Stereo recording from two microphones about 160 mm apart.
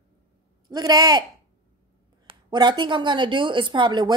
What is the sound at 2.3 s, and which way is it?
A woman's voice, 25° right (ahead or behind).